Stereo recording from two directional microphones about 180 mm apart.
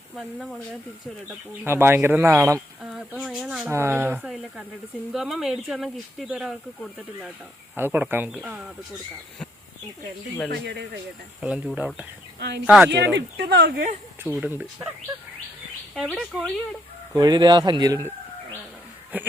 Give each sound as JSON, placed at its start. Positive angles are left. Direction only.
{"t": 0.2, "sound": "speech", "side_deg": 0}
{"t": 1.6, "sound": "speech", "side_deg": -15}
{"t": 2.9, "sound": "speech", "side_deg": 0}
{"t": 3.7, "sound": "speech", "side_deg": -15}
{"t": 4.3, "sound": "speech", "side_deg": 0}
{"t": 7.8, "sound": "speech", "side_deg": -10}
{"t": 10.5, "sound": "speech", "side_deg": -70}
{"t": 11.4, "sound": "speech", "side_deg": -10}
{"t": 12.4, "sound": "speech", "side_deg": -65}
{"t": 12.6, "sound": "speech", "side_deg": -10}
{"t": 12.9, "sound": "speech", "side_deg": -70}
{"t": 14.3, "sound": "speech", "side_deg": -10}
{"t": 16.0, "sound": "speech", "side_deg": 0}
{"t": 17.2, "sound": "speech", "side_deg": -25}